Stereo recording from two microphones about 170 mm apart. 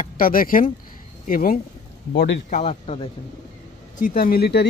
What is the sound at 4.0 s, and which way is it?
Speech, 55° left (ahead or behind).